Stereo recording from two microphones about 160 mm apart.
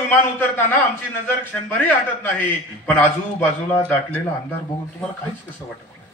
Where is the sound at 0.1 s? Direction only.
10° left (ahead or behind).